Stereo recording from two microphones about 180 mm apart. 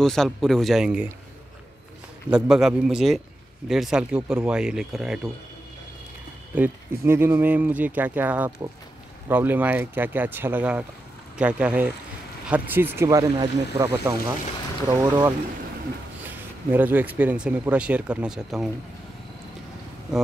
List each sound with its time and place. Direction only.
0.0 s speech: centre (ahead or behind)
2.3 s speech: 5° right (ahead or behind)
6.5 s speech: 10° right (ahead or behind)